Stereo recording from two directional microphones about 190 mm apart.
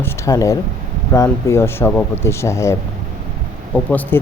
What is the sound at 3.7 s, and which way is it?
Speech, 10° left (ahead or behind).